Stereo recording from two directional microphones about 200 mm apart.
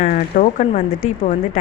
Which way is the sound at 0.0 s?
40° left (ahead or behind).